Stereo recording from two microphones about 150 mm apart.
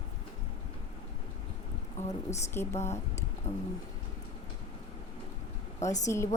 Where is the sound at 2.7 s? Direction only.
45° left (ahead or behind).